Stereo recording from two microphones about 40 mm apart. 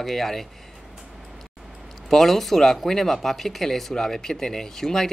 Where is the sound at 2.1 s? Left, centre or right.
Centre.